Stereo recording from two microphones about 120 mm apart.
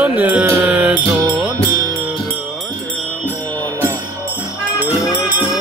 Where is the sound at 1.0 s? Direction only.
25° right (ahead or behind).